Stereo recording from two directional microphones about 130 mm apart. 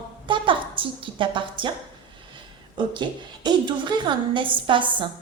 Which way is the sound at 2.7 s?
35° right (ahead or behind).